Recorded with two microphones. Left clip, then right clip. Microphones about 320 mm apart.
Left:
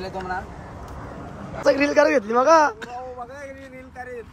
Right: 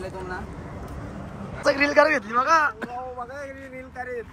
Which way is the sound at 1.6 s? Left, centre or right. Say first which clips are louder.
Left 1 dB; centre.